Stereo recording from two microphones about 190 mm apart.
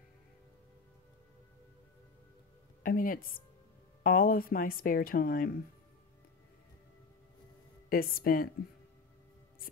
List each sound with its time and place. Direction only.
2.8 s a woman's voice: 45° left (ahead or behind)
7.9 s speech: 50° left (ahead or behind)